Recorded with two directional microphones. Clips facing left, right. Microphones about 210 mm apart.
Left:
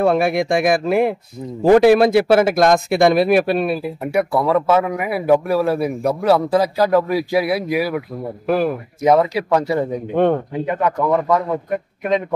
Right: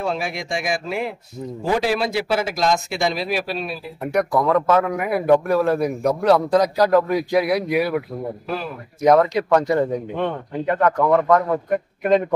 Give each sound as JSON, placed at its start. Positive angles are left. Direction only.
{"t": 0.0, "sound": "a man's voice", "side_deg": 55}
{"t": 4.0, "sound": "a man's voice", "side_deg": 10}
{"t": 8.5, "sound": "a man's voice", "side_deg": 60}
{"t": 9.0, "sound": "a man's voice", "side_deg": 10}
{"t": 10.1, "sound": "speech", "side_deg": 50}
{"t": 10.7, "sound": "a man's voice", "side_deg": 10}